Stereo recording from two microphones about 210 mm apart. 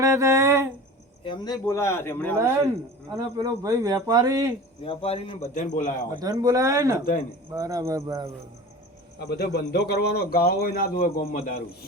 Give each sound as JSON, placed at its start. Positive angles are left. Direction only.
{"t": 0.0, "sound": "speech", "side_deg": -15}
{"t": 1.2, "sound": "speech", "side_deg": 20}
{"t": 3.1, "sound": "speech", "side_deg": -15}
{"t": 4.8, "sound": "a man's voice", "side_deg": 25}
{"t": 6.1, "sound": "speech", "side_deg": -20}
{"t": 9.1, "sound": "speech", "side_deg": 50}